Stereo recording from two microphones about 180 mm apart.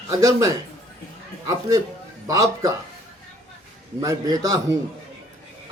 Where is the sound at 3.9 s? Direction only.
20° right (ahead or behind).